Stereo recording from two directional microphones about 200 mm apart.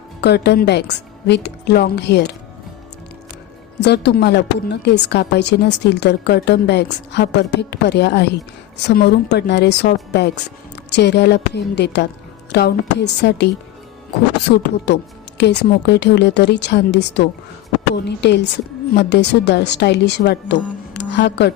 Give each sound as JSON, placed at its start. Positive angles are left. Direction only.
{"t": 0.2, "sound": "a woman's voice", "side_deg": 55}
{"t": 3.8, "sound": "a woman's voice", "side_deg": 55}
{"t": 14.5, "sound": "a woman's voice", "side_deg": 50}